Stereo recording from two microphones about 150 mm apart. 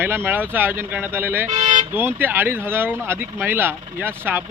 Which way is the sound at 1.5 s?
55° right (ahead or behind).